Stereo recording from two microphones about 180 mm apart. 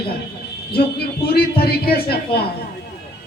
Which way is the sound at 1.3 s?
60° left (ahead or behind).